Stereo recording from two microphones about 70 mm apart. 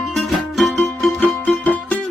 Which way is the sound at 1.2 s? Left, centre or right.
Left.